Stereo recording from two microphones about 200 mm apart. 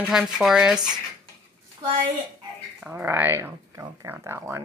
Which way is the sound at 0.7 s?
20° right (ahead or behind).